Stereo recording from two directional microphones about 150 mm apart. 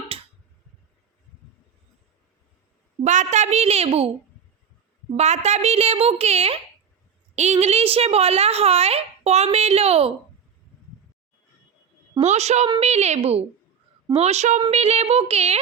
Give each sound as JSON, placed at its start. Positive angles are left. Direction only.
{"t": 0.1, "sound": "a sound", "side_deg": -40}
{"t": 3.0, "sound": "a woman's voice", "side_deg": -55}
{"t": 5.1, "sound": "a woman's voice", "side_deg": -45}
{"t": 12.2, "sound": "a woman's voice", "side_deg": -50}